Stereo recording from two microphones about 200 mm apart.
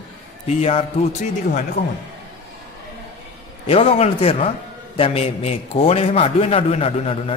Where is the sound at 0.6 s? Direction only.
30° left (ahead or behind).